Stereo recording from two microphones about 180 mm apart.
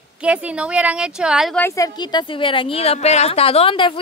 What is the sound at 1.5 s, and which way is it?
A woman's voice, 15° left (ahead or behind).